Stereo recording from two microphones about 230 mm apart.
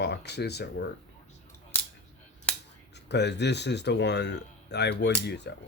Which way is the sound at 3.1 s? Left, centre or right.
Left.